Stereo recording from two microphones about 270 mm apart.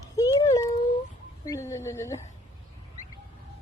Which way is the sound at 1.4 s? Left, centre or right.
Centre.